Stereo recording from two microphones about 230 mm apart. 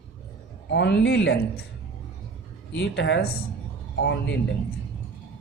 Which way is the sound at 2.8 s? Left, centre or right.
Left.